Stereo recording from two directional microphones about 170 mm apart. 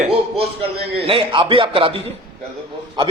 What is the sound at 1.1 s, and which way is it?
Speech, 30° right (ahead or behind).